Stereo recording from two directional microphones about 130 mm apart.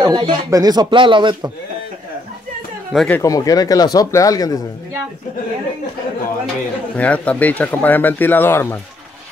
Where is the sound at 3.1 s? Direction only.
25° left (ahead or behind).